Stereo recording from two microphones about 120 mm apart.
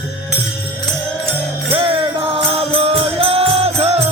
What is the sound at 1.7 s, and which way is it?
Music, 50° right (ahead or behind).